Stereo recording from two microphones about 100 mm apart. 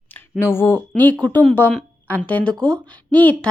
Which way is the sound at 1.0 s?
15° left (ahead or behind).